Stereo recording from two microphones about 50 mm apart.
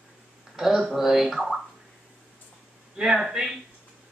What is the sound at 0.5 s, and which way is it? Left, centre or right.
Speech, centre.